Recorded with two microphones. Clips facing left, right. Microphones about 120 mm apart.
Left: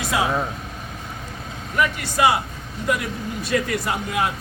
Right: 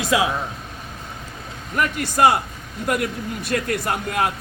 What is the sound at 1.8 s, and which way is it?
Speech, 50° right (ahead or behind).